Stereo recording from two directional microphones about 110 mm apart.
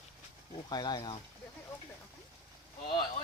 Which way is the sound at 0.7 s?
40° left (ahead or behind).